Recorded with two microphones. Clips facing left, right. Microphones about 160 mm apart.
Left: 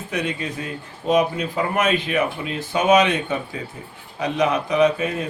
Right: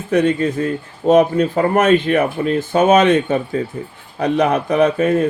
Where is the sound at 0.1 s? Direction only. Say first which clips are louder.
Right 11 dB; 50° right (ahead or behind).